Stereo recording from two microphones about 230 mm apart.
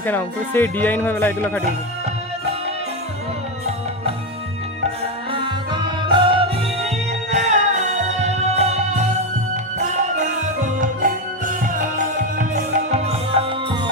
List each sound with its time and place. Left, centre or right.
0.0 s speech: centre
5.3 s music: right
12.9 s music: right